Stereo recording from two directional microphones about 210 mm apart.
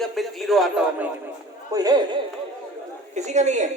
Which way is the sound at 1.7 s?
20° right (ahead or behind).